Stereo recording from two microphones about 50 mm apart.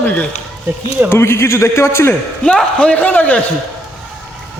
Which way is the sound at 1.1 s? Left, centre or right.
Left.